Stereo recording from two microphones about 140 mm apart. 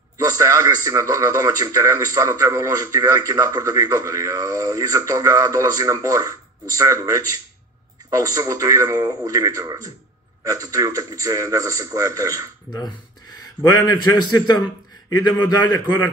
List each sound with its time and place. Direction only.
0.2 s speech: 25° right (ahead or behind)
12.7 s a man's voice: 30° left (ahead or behind)